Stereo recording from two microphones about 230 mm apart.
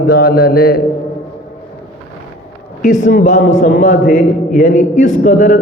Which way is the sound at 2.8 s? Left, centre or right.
Left.